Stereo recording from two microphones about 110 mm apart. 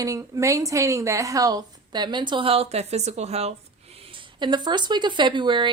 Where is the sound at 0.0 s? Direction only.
30° right (ahead or behind).